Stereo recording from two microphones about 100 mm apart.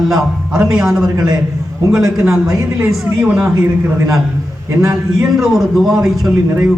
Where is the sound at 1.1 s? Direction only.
40° right (ahead or behind).